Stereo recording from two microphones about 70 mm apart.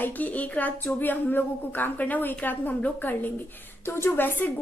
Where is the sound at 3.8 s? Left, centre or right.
Left.